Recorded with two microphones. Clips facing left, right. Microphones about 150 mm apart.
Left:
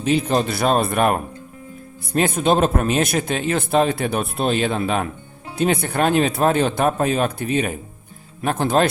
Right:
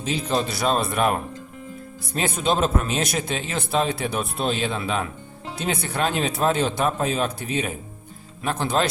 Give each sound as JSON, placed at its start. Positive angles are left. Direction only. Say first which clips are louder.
{"t": 0.0, "sound": "speech", "louder": "left 5 dB", "side_deg": 60}
{"t": 2.1, "sound": "speech", "louder": "left 5 dB", "side_deg": 55}